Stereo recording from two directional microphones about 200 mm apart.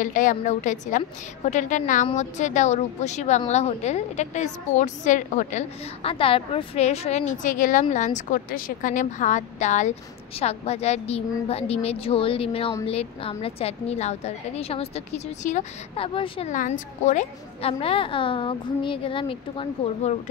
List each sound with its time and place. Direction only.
0.0 s a woman's voice: 40° left (ahead or behind)
16.5 s a woman's voice: 40° left (ahead or behind)